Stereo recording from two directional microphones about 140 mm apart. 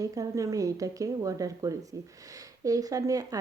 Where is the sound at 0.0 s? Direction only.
25° right (ahead or behind).